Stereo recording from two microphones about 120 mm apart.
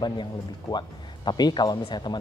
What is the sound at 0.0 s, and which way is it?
Speech, 35° left (ahead or behind).